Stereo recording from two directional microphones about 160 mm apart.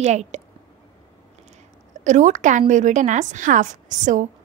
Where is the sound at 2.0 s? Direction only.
50° right (ahead or behind).